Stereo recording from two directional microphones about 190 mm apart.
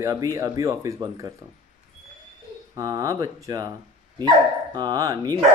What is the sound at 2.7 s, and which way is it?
Speech, 15° right (ahead or behind).